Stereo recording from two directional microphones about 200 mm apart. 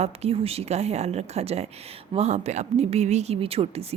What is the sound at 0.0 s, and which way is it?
A woman's voice, 30° right (ahead or behind).